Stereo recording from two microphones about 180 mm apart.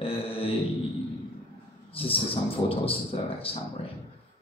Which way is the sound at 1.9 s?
30° left (ahead or behind).